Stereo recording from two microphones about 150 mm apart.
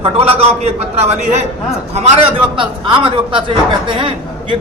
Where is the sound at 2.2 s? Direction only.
35° right (ahead or behind).